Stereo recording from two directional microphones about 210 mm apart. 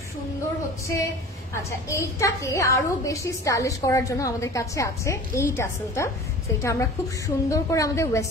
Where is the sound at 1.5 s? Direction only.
15° left (ahead or behind).